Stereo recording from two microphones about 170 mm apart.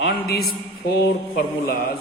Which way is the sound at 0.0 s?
65° left (ahead or behind).